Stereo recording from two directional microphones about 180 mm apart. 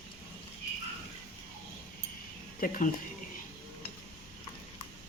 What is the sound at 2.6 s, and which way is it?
Speech, 50° left (ahead or behind).